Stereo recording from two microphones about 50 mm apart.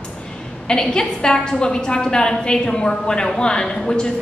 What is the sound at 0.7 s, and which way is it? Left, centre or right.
A woman's voice, centre.